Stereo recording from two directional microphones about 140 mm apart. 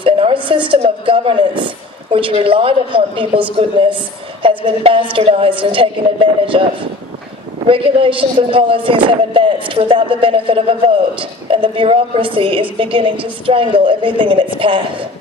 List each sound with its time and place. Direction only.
0.0 s a woman's voice: 40° right (ahead or behind)
7.7 s speech: 40° right (ahead or behind)